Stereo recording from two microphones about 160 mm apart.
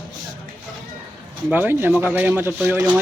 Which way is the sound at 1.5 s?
10° right (ahead or behind).